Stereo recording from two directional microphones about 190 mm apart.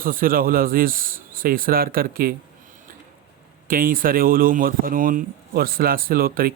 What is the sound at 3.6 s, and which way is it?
Speech, 45° right (ahead or behind).